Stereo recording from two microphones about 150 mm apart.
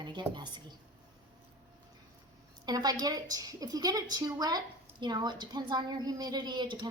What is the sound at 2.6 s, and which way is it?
A woman's voice, 25° right (ahead or behind).